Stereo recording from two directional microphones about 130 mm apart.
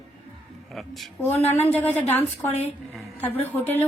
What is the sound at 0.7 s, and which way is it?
Speech, centre (ahead or behind).